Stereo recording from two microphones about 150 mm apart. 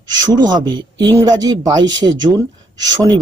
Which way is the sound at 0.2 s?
25° right (ahead or behind).